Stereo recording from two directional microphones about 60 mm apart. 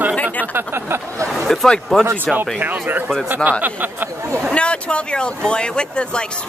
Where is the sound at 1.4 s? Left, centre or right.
Centre.